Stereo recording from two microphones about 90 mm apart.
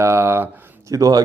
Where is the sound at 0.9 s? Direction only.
40° right (ahead or behind).